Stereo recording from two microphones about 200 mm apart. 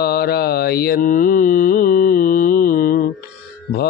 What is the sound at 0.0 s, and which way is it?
Mantra, 50° left (ahead or behind).